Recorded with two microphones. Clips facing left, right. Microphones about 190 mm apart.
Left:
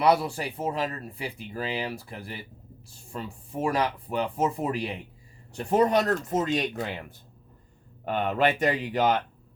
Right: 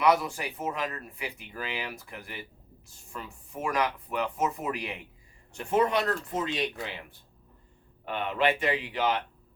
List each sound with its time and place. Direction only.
0.0 s speech: 30° left (ahead or behind)